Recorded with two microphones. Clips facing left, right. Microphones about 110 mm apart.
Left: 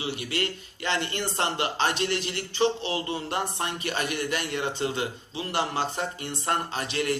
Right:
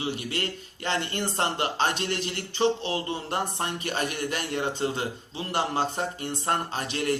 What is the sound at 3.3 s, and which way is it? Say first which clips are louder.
Speech: right 2 dB; 45° right (ahead or behind).